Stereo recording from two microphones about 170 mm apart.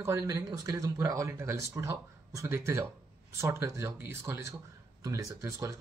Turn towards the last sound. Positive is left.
turn(degrees=-20)  # may be behind; listen again after turning